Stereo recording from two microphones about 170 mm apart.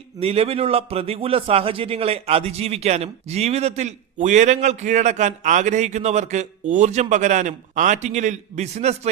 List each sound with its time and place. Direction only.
0.2 s a man's voice: 35° right (ahead or behind)